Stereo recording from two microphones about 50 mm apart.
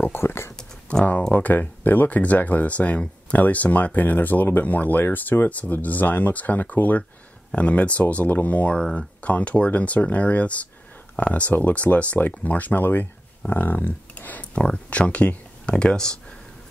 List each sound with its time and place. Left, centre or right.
0.0 s speech: left
0.9 s speech: left